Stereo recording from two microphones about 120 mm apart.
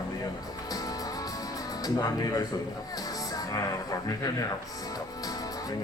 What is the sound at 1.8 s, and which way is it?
Speech, 30° left (ahead or behind).